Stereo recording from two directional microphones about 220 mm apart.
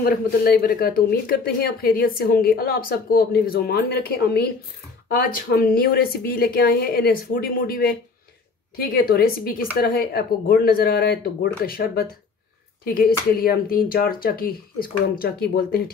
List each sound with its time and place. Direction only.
0.0 s speech: 45° left (ahead or behind)